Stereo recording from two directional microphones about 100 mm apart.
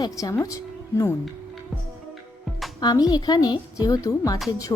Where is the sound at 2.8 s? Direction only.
40° left (ahead or behind).